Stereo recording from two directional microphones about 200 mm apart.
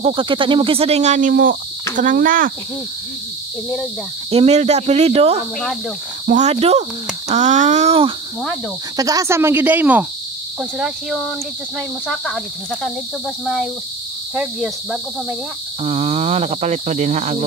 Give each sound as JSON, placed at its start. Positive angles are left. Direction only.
{"t": 0.0, "sound": "speech", "side_deg": -25}
{"t": 4.3, "sound": "speech", "side_deg": -30}
{"t": 8.9, "sound": "speech", "side_deg": -20}
{"t": 10.6, "sound": "cricket", "side_deg": 0}
{"t": 14.3, "sound": "cricket", "side_deg": -5}
{"t": 15.8, "sound": "speech", "side_deg": -30}